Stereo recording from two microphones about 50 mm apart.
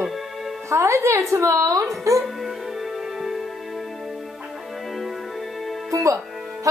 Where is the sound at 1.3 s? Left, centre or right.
Right.